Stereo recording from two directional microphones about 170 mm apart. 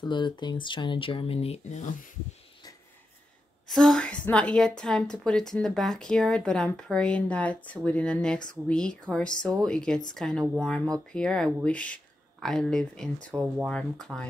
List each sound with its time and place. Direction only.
0.0 s speech: 25° left (ahead or behind); by 2.0 s 45° left (ahead or behind)
3.6 s a woman's voice: 5° left (ahead or behind)